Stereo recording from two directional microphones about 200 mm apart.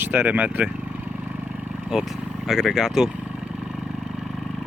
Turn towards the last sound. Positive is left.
turn(degrees=0)  # may be behind; listen again after turning